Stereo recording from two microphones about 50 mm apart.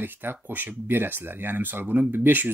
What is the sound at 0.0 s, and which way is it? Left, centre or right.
Speech, right.